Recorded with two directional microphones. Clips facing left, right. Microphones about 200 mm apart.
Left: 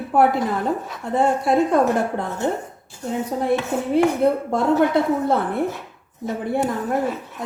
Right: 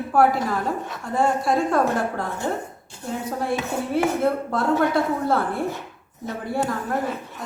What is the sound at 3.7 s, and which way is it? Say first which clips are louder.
A woman's voice: left 3 dB; 20° left (ahead or behind).